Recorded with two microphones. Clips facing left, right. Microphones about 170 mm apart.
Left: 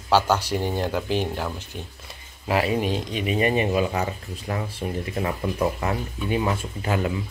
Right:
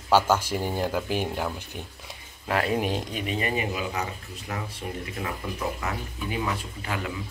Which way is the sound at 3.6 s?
35° left (ahead or behind).